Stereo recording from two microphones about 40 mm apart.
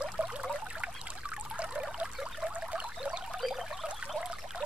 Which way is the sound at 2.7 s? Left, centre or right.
Right.